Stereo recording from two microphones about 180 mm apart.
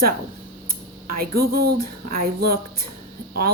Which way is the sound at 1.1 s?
55° right (ahead or behind).